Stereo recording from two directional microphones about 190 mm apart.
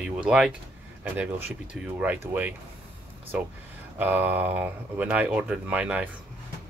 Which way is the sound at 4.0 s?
10° right (ahead or behind).